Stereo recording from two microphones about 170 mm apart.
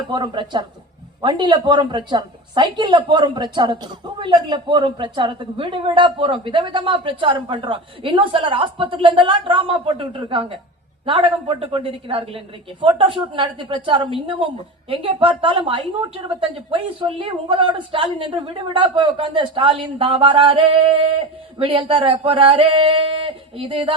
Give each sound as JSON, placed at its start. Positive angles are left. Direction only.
{"t": 0.1, "sound": "a woman's voice", "side_deg": -30}